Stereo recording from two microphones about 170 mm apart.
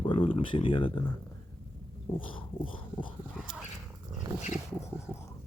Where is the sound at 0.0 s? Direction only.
30° left (ahead or behind).